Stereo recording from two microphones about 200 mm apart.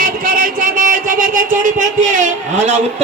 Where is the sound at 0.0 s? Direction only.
45° right (ahead or behind).